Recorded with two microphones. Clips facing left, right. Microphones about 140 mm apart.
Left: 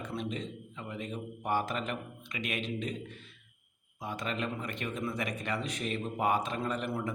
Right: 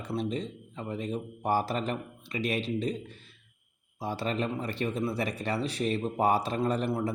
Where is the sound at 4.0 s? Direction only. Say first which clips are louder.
Right 5 dB; 30° right (ahead or behind).